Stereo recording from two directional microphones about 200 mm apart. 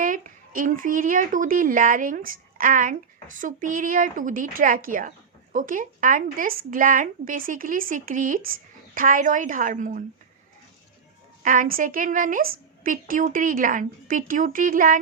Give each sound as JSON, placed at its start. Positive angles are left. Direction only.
{"t": 0.0, "sound": "a woman's voice", "side_deg": -45}
{"t": 11.4, "sound": "a woman's voice", "side_deg": -45}